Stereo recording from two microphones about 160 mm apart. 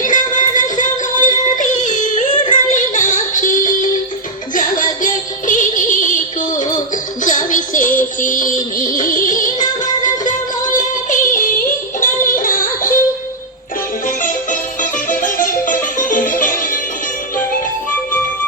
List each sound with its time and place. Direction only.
0.0 s music: 55° left (ahead or behind)
10.8 s child singing: 55° left (ahead or behind)
12.4 s yodeling: 60° left (ahead or behind)
14.2 s music: 55° left (ahead or behind)